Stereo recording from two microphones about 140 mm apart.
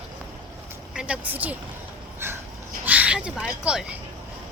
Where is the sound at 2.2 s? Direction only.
15° right (ahead or behind).